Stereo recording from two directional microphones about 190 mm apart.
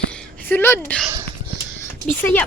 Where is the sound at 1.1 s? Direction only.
20° right (ahead or behind).